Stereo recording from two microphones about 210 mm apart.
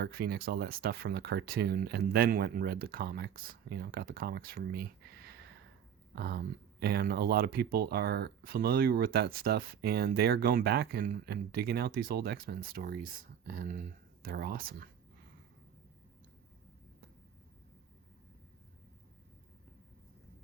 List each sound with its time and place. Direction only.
0.0 s speech: 50° right (ahead or behind)